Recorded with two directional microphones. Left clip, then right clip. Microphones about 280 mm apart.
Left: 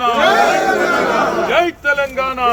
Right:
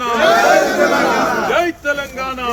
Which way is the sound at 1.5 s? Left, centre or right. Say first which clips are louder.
Left 2 dB; centre.